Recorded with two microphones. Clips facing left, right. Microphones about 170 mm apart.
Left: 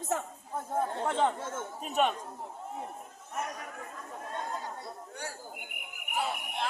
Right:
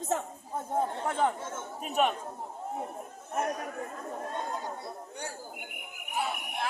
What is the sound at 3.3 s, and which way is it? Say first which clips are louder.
Chatter: right 6 dB; 50° right (ahead or behind).